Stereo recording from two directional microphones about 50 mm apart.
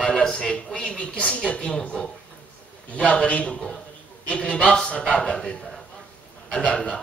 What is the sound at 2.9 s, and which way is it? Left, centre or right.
A woman's voice, left.